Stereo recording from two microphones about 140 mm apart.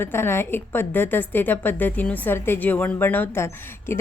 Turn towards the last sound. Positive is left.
turn(degrees=15)  # may be behind; listen again after turning